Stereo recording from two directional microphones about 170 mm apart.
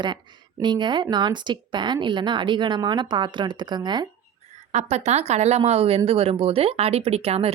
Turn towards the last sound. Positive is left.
turn(degrees=-35)  # may be behind; listen again after turning